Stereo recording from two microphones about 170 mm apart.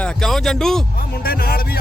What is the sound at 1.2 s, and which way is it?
Speech, 60° left (ahead or behind).